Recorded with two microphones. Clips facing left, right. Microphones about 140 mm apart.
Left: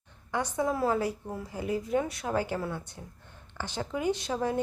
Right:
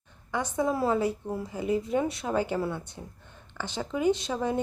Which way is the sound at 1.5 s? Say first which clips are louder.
Right 2 dB; 20° right (ahead or behind).